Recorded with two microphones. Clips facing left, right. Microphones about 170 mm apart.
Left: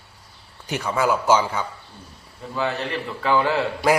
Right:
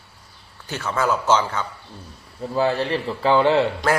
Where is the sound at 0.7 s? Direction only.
15° left (ahead or behind).